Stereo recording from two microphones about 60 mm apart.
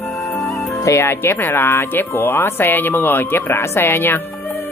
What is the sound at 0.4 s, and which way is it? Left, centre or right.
Speech, left.